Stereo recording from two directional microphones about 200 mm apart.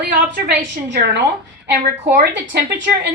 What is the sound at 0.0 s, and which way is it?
A woman's voice, 55° right (ahead or behind).